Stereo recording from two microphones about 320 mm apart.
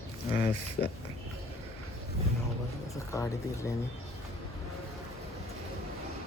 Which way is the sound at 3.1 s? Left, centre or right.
Centre.